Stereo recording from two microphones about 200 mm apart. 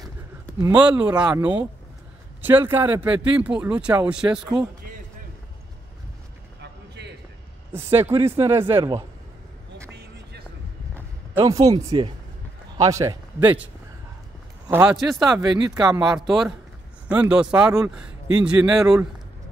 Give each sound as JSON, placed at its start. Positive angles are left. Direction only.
{"t": 0.0, "sound": "a man's voice", "side_deg": -15}
{"t": 6.6, "sound": "a sound", "side_deg": -60}
{"t": 7.7, "sound": "speech", "side_deg": -10}
{"t": 9.9, "sound": "music", "side_deg": -55}
{"t": 11.3, "sound": "a man's voice", "side_deg": -20}
{"t": 14.7, "sound": "a man's voice", "side_deg": -10}